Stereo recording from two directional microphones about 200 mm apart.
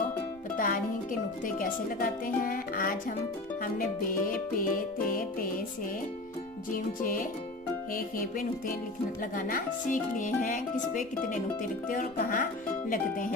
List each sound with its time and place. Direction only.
0.5 s speech: 45° left (ahead or behind)
3.6 s music: 45° left (ahead or behind)
6.7 s music: 45° left (ahead or behind)
9.3 s speech: 45° left (ahead or behind)
11.9 s music: 40° left (ahead or behind)